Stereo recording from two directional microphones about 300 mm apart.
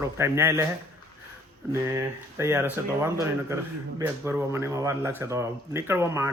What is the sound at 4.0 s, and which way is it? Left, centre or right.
Speech, centre.